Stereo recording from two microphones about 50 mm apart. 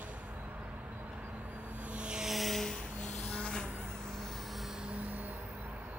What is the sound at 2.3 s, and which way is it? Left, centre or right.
Vehicle, centre.